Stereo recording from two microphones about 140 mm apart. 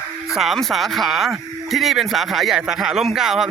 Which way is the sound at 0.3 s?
Centre (ahead or behind).